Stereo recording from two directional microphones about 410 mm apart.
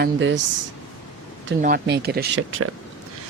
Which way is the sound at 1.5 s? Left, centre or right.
Right.